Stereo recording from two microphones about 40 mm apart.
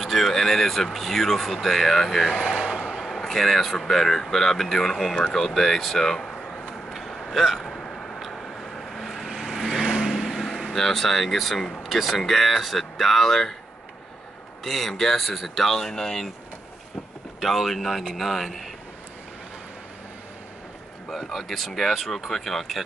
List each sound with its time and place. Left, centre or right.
0.0 s speech: centre
2.5 s a sound: centre
3.0 s speech: centre
6.9 s vehicle: centre
7.6 s a sound: left
8.2 s vehicle: centre
9.8 s vehicle: centre
10.3 s vehicle: centre
10.7 s speech: centre
14.6 s speech: centre
17.4 s speech: centre
21.1 s speech: centre